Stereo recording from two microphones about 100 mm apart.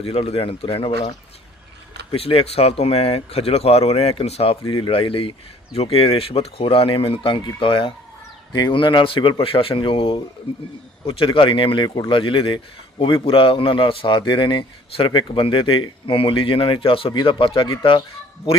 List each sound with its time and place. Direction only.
0.0 s speech: 75° left (ahead or behind)
2.0 s speech: 75° left (ahead or behind)
4.6 s a man's voice: 55° left (ahead or behind)
5.7 s a man's voice: 85° left; by 17.1 s 65° left (ahead or behind)
17.1 s speech: 45° left (ahead or behind)
17.3 s a man's voice: 60° left (ahead or behind)